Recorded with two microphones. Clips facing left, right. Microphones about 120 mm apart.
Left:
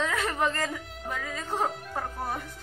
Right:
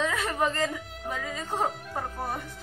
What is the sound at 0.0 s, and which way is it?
Speech, 5° right (ahead or behind).